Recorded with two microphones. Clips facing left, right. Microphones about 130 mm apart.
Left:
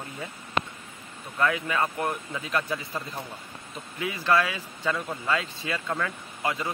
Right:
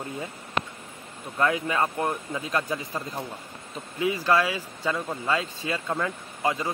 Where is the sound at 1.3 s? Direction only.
25° right (ahead or behind).